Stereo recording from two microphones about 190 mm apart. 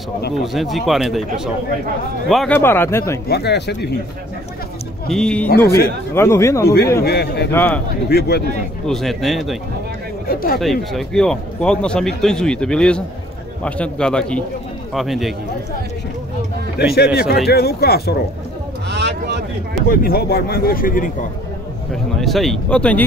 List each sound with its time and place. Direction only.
0.4 s speech: centre (ahead or behind)
3.3 s speech: 60° left (ahead or behind)
5.1 s speech: 5° left (ahead or behind)
7.0 s speech: 55° left (ahead or behind)
7.5 s speech: 10° left (ahead or behind)
8.1 s speech: 55° left (ahead or behind)
8.8 s speech: centre (ahead or behind)
10.2 s speech: 50° left (ahead or behind)
10.6 s speech: centre (ahead or behind)
16.7 s speech: 55° left (ahead or behind)
18.9 s speech: 65° right (ahead or behind)
19.9 s speech: 50° left (ahead or behind)
22.2 s speech: centre (ahead or behind)